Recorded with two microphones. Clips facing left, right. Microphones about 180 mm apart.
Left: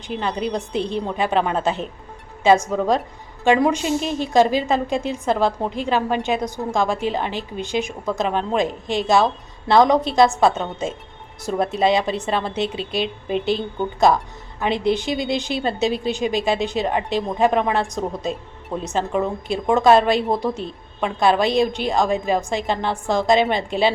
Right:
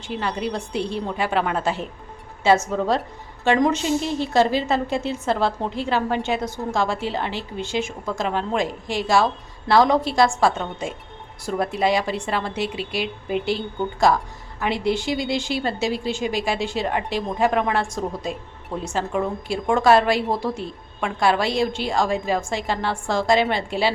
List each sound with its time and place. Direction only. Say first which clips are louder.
0.1 s a woman's voice: left 2 dB; 20° left (ahead or behind)